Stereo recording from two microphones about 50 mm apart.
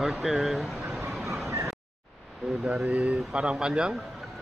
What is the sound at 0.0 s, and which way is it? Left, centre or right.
Speech, centre.